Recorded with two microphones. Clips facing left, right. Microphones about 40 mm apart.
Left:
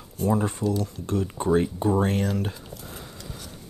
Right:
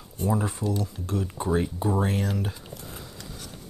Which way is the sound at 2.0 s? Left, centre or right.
Left.